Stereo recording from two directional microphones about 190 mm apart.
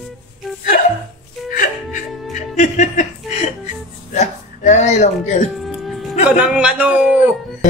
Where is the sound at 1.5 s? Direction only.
45° left (ahead or behind).